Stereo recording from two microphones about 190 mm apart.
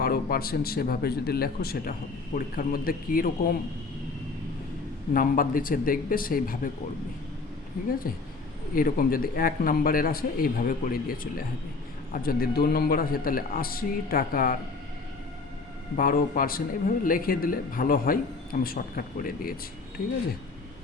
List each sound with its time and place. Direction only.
0.0 s speech: 50° left (ahead or behind)
5.1 s speech: 50° left (ahead or behind)
8.1 s speech: 50° left (ahead or behind)
16.0 s speech: 45° left (ahead or behind)